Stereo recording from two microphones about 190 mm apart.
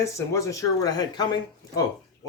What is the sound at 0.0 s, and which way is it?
Speech, 15° left (ahead or behind).